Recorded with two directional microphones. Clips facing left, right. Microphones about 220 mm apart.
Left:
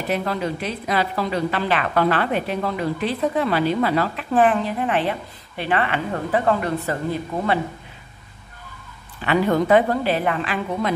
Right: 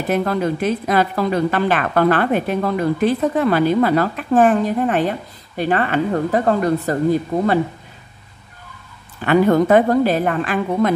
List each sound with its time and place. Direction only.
0.1 s a woman's voice: 50° right (ahead or behind)
9.2 s a woman's voice: 45° right (ahead or behind)